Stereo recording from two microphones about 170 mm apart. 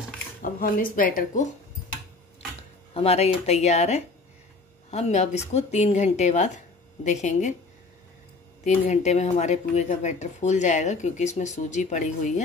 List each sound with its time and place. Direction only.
0.4 s speech: 55° left (ahead or behind)
2.9 s speech: 35° left (ahead or behind)
8.6 s speech: 40° left (ahead or behind)